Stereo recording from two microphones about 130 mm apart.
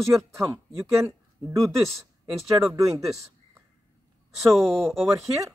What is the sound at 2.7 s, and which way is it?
Speech, 25° right (ahead or behind).